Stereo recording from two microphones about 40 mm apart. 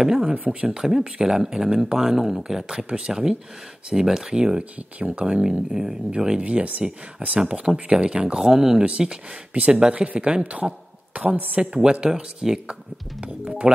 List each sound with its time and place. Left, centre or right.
0.0 s speech: centre
4.9 s a woman's voice: right
5.2 s speech: right
8.4 s speech: centre
10.4 s a woman's voice: right
11.7 s speech: right